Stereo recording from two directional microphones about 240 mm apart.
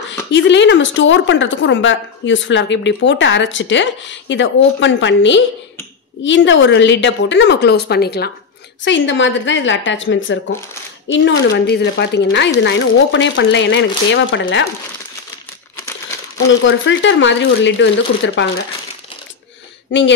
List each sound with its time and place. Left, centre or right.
0.3 s a woman's voice: left
16.6 s a woman's voice: left
19.9 s a woman's voice: left